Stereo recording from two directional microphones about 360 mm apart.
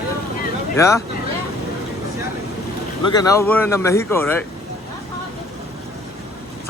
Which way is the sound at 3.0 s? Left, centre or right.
Centre.